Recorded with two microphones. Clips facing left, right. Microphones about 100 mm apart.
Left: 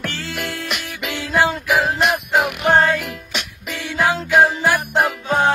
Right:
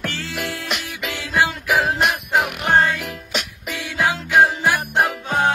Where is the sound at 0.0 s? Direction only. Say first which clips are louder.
Even; centre (ahead or behind).